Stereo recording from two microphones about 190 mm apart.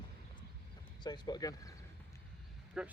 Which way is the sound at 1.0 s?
20° left (ahead or behind).